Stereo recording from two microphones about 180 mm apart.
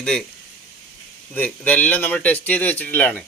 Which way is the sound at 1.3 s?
5° left (ahead or behind).